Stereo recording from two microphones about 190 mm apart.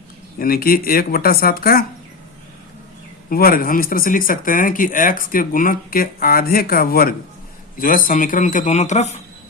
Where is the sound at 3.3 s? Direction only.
50° left (ahead or behind).